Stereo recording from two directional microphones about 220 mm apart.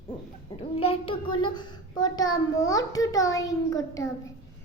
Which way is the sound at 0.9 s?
25° left (ahead or behind).